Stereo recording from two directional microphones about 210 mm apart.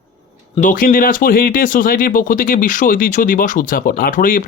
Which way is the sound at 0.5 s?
40° left (ahead or behind).